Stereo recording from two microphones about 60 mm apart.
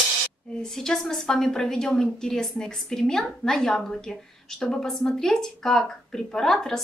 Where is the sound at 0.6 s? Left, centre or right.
Centre.